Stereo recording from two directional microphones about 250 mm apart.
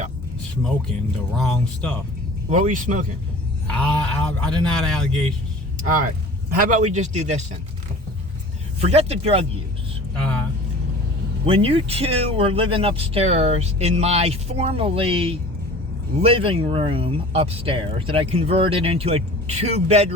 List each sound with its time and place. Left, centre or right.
1.4 s a man's voice: centre
2.5 s speech: right
3.7 s a man's voice: centre
5.8 s speech: right
8.8 s speech: right
11.4 s speech: right